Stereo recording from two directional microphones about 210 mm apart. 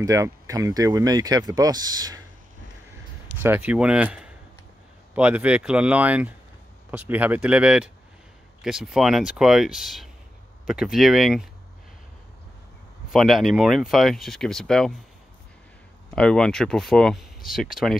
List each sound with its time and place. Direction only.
0.0 s speech: 15° right (ahead or behind)
3.4 s speech: 10° right (ahead or behind)
13.1 s speech: centre (ahead or behind)
16.2 s speech: 5° left (ahead or behind)